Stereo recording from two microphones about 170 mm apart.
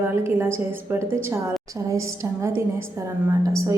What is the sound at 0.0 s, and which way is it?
A woman's voice, 15° right (ahead or behind).